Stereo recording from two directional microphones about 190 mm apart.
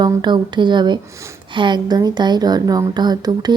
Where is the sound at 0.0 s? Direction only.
25° right (ahead or behind).